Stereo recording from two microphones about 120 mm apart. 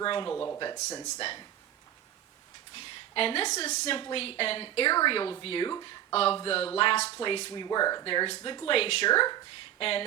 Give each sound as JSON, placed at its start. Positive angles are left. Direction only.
{"t": 0.0, "sound": "speech", "side_deg": 45}
{"t": 2.7, "sound": "a woman's voice", "side_deg": 50}
{"t": 3.9, "sound": "speech", "side_deg": 50}
{"t": 6.1, "sound": "speech", "side_deg": 55}